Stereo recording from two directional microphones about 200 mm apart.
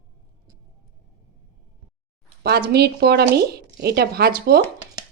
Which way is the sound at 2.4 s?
55° right (ahead or behind).